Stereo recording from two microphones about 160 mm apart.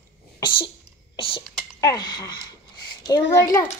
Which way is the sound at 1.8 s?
25° left (ahead or behind).